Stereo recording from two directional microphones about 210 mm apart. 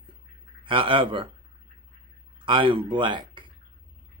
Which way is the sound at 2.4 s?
25° right (ahead or behind).